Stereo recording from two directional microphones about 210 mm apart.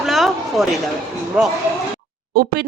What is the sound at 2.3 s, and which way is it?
Speech, 50° right (ahead or behind).